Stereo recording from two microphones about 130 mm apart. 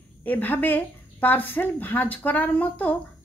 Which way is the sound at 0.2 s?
15° left (ahead or behind).